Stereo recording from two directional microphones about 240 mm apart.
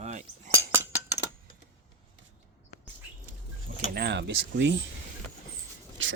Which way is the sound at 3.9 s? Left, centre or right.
Right.